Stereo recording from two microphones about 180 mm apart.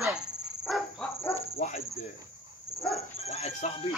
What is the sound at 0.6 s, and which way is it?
Cricket, centre (ahead or behind).